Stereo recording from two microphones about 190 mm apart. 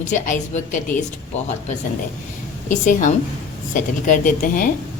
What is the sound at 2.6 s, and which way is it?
A woman's voice, 40° left (ahead or behind).